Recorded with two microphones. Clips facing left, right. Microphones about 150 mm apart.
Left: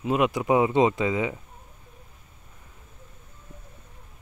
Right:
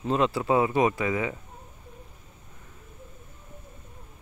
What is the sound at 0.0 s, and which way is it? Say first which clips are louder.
Speech: left 1 dB; 10° left (ahead or behind).